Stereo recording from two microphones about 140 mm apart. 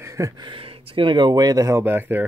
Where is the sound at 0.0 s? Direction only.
20° right (ahead or behind).